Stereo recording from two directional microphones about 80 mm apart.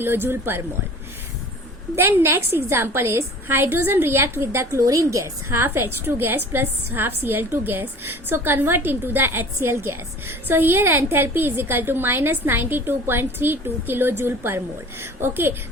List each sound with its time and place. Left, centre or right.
0.0 s a woman's voice: right
2.0 s a woman's voice: right